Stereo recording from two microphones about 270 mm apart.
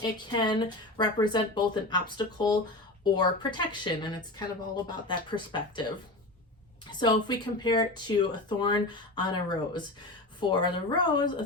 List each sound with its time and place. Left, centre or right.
0.0 s speech: centre
6.9 s speech: centre